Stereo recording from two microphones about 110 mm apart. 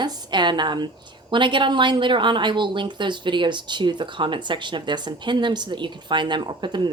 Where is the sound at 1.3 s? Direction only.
45° right (ahead or behind).